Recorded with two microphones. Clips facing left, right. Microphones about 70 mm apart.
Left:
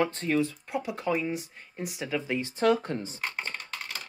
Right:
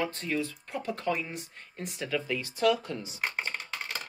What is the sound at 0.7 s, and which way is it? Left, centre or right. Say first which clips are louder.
Speech: left 2 dB; centre.